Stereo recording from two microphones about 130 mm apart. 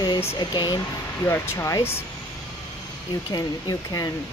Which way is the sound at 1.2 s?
20° left (ahead or behind).